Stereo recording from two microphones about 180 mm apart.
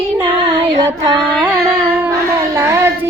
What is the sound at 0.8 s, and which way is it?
Female singing, 20° right (ahead or behind).